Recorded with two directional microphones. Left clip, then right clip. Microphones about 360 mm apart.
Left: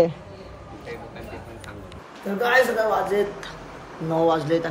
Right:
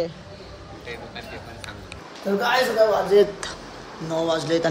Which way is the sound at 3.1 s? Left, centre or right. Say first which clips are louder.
Right 6 dB; centre.